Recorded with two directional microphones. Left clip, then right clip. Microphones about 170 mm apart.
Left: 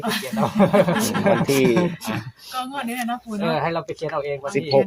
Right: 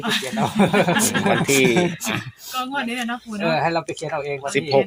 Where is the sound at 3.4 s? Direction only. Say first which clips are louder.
Right 3 dB; 45° right (ahead or behind).